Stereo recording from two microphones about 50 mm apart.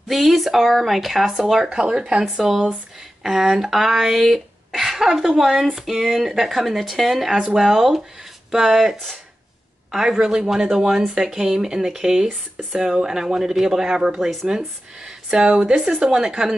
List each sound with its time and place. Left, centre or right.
0.1 s speech: centre